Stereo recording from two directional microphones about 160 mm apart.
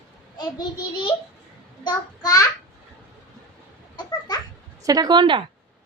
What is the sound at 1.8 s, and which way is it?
Speech, 25° left (ahead or behind).